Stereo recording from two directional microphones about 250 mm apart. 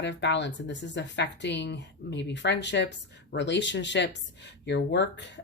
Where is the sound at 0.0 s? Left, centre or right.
Left.